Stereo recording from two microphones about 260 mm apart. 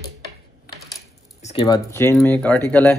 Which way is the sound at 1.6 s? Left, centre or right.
Centre.